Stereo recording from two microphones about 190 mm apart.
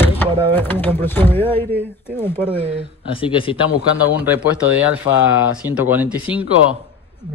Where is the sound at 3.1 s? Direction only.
30° left (ahead or behind).